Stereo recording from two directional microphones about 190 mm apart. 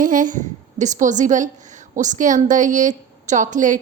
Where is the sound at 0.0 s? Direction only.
45° right (ahead or behind).